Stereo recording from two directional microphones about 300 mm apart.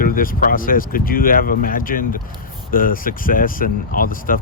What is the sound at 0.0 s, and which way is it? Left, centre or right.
Speech, left.